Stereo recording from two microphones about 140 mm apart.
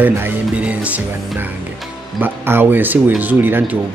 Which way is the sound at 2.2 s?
15° right (ahead or behind).